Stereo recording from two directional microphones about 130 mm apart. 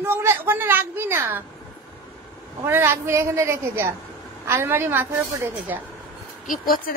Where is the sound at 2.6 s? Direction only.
20° right (ahead or behind).